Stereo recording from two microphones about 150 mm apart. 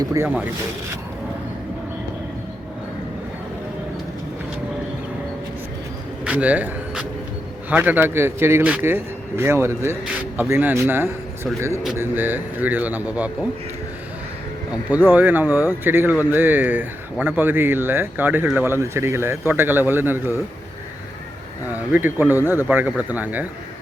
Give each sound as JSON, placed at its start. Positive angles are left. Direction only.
{"t": 0.0, "sound": "speech", "side_deg": -20}
{"t": 6.2, "sound": "speech", "side_deg": -10}
{"t": 14.7, "sound": "speech", "side_deg": -10}
{"t": 21.7, "sound": "speech", "side_deg": -10}